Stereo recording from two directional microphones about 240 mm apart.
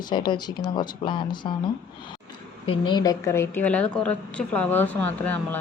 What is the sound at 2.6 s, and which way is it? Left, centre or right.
A woman's voice, left.